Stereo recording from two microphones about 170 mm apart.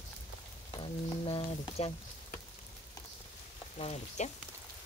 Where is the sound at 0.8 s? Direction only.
35° left (ahead or behind).